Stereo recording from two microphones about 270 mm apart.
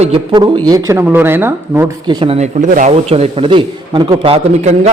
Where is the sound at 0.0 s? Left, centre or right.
Centre.